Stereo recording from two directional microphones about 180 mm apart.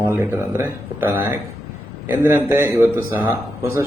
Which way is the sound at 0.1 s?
10° right (ahead or behind).